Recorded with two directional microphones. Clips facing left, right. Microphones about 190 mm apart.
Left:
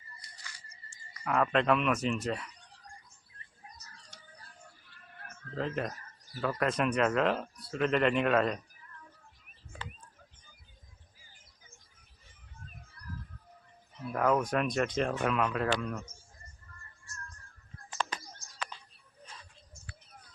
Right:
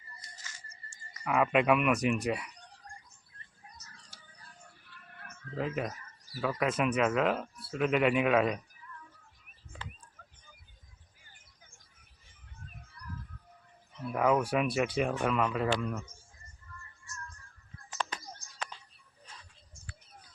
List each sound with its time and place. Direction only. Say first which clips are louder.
0.2 s scissors: right 1 dB; 20° right (ahead or behind)
1.2 s speech: right 1 dB; 5° right (ahead or behind)
5.5 s speech: even; 5° right (ahead or behind)
14.1 s speech: right 1 dB; 5° right (ahead or behind)